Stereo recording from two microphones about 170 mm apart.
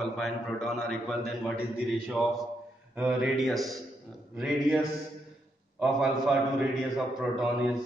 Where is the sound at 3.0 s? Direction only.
5° right (ahead or behind).